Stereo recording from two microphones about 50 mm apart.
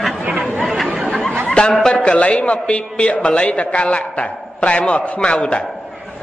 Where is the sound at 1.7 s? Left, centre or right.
Centre.